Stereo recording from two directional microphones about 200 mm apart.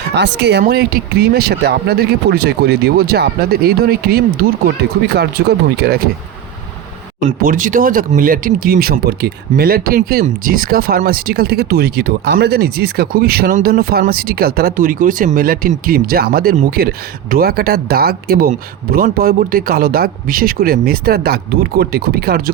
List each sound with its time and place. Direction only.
0.1 s speech: 60° right (ahead or behind)
7.2 s speech: 40° right (ahead or behind)